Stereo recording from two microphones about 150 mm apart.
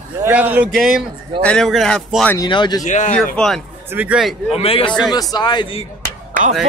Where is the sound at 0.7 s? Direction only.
Centre (ahead or behind).